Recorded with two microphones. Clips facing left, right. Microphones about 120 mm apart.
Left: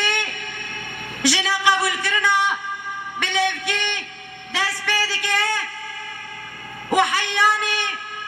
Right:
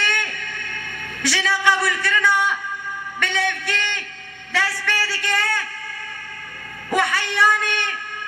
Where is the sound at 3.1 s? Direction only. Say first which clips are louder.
Left 1 dB; 20° left (ahead or behind).